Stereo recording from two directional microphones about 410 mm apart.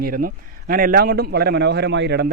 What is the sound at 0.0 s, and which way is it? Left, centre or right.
Speech, right.